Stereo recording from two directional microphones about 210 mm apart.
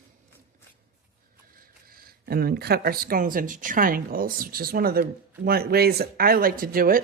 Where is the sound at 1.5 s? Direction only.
45° right (ahead or behind).